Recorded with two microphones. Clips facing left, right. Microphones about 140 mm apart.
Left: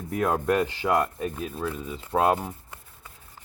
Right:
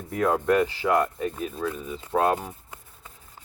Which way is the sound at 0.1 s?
15° left (ahead or behind).